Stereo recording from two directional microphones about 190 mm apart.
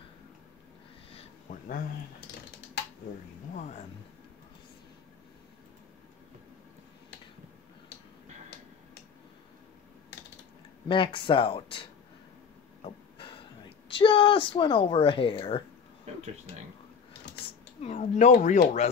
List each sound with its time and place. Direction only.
1.5 s speech: 50° left (ahead or behind)
3.5 s speech: 40° left (ahead or behind)
10.9 s speech: 25° left (ahead or behind)
12.8 s speech: 30° left (ahead or behind)
17.8 s speech: 35° left (ahead or behind)